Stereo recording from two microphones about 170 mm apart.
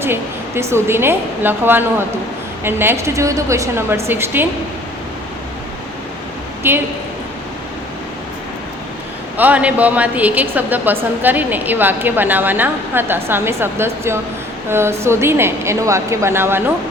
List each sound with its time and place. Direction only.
0.0 s a woman's voice: 15° right (ahead or behind)
6.6 s a woman's voice: 15° right (ahead or behind)
9.4 s a woman's voice: 10° right (ahead or behind)